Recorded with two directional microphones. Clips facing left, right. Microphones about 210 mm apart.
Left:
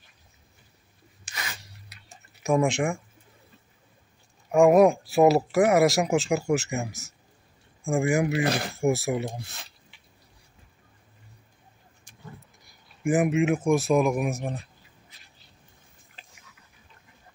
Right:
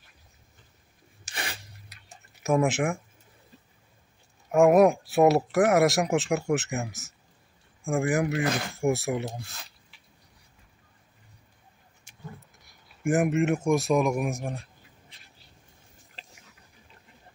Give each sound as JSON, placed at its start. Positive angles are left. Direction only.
{"t": 1.2, "sound": "a sound", "side_deg": -30}
{"t": 2.4, "sound": "speech", "side_deg": -5}
{"t": 4.5, "sound": "speech", "side_deg": 0}
{"t": 9.3, "sound": "speech", "side_deg": 20}
{"t": 12.5, "sound": "a sound", "side_deg": 0}
{"t": 13.7, "sound": "speech", "side_deg": 0}